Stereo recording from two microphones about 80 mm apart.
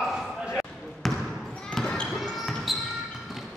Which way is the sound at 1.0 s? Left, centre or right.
Centre.